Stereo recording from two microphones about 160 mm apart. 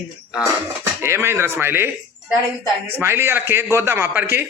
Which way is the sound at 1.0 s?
15° right (ahead or behind).